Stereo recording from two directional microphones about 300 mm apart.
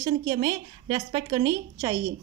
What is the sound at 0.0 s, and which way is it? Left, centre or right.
A woman's voice, centre.